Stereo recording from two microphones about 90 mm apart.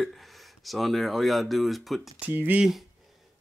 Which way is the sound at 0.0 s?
Centre (ahead or behind).